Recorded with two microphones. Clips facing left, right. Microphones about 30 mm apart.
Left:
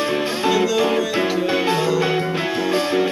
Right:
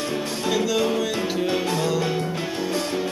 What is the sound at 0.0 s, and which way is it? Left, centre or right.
Music, left.